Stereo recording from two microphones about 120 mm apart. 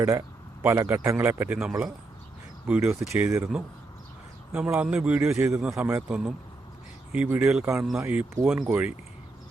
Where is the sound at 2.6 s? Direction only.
10° right (ahead or behind).